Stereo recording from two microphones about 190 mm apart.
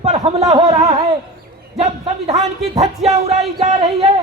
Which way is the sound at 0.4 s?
30° right (ahead or behind).